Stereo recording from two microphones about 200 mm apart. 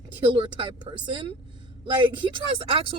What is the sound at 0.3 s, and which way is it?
Speech, 25° right (ahead or behind).